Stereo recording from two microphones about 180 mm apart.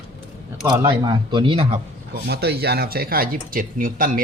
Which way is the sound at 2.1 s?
65° right (ahead or behind).